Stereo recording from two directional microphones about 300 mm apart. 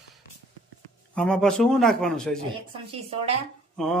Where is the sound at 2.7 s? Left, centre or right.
Centre.